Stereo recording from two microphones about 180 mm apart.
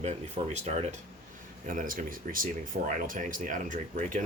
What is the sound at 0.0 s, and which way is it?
Speech, 40° right (ahead or behind).